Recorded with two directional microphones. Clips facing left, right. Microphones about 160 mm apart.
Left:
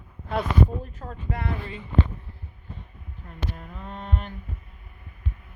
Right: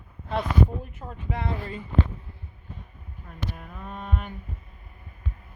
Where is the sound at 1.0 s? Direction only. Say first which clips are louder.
Left 1 dB; 5° right (ahead or behind).